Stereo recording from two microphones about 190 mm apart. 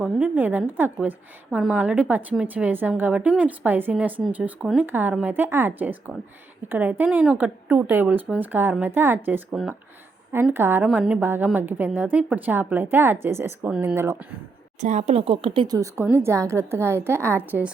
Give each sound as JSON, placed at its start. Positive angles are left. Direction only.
{"t": 0.0, "sound": "a woman's voice", "side_deg": -10}
{"t": 14.8, "sound": "a woman's voice", "side_deg": -35}